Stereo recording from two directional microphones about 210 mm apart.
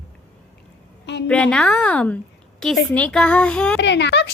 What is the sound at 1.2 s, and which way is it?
A woman's voice, 5° left (ahead or behind).